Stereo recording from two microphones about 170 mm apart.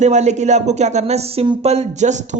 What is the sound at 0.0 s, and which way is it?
Speech, 45° right (ahead or behind).